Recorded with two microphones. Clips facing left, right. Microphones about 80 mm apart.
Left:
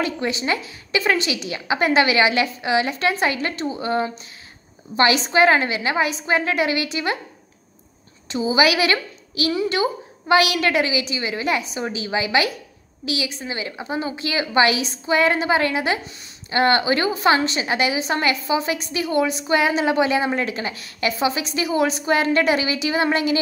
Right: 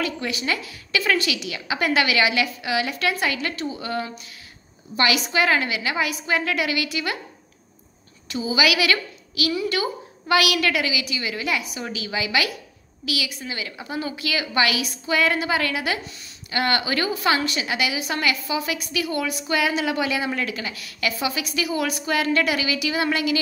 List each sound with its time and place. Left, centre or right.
0.0 s a woman's voice: left
8.3 s a woman's voice: left